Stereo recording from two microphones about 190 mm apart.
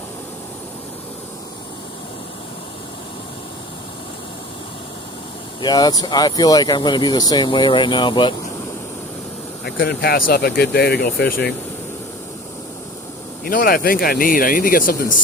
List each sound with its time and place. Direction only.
5.6 s speech: 20° left (ahead or behind)
9.6 s speech: 55° left (ahead or behind)
13.4 s speech: 50° left (ahead or behind)